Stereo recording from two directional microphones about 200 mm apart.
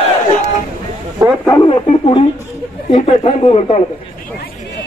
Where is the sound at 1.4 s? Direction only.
20° left (ahead or behind).